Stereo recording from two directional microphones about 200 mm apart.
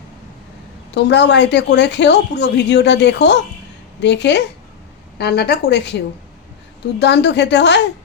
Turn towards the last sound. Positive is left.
turn(degrees=60)  # may be behind; listen again after turning